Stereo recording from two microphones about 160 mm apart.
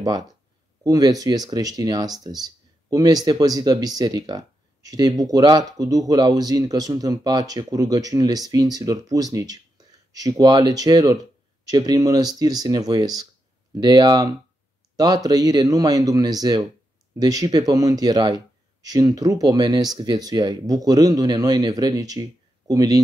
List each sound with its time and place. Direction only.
0.8 s speech: 20° right (ahead or behind)